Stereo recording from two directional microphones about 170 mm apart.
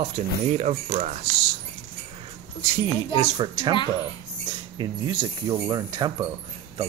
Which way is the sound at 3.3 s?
20° right (ahead or behind).